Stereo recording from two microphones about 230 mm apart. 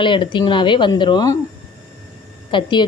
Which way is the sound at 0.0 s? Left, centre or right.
Left.